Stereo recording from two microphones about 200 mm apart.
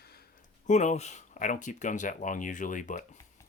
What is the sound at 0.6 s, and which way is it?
Speech, 35° left (ahead or behind).